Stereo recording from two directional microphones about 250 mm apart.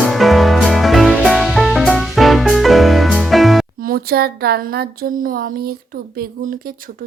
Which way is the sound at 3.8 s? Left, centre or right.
Right.